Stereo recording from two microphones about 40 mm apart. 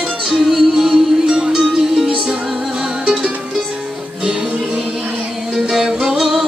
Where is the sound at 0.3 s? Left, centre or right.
Centre.